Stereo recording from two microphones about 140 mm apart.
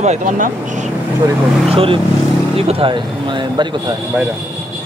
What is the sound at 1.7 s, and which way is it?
Speech, 40° right (ahead or behind).